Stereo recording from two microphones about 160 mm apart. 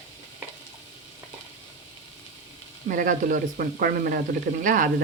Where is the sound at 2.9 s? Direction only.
60° right (ahead or behind).